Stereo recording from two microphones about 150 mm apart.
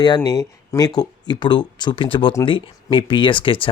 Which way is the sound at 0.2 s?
20° left (ahead or behind).